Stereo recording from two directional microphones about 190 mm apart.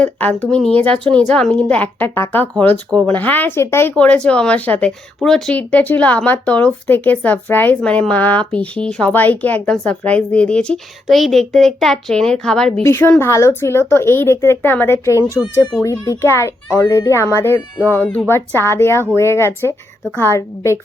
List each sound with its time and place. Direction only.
0.0 s a woman's voice: 10° left (ahead or behind)